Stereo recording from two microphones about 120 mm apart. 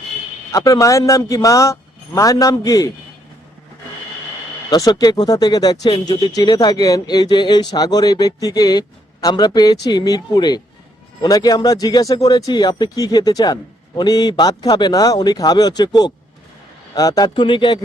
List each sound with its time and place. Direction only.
0.5 s speech: 30° left (ahead or behind)
4.7 s speech: 30° left (ahead or behind)